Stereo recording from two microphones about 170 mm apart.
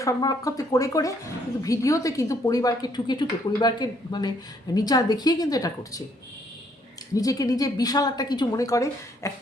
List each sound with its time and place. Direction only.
0.0 s a woman's voice: 20° left (ahead or behind)
7.1 s a woman's voice: 20° left (ahead or behind)